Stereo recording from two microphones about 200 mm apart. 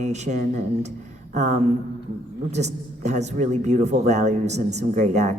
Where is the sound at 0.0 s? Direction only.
35° right (ahead or behind).